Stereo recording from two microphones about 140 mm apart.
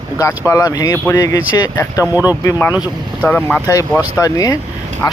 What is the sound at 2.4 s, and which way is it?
Speech, 20° left (ahead or behind).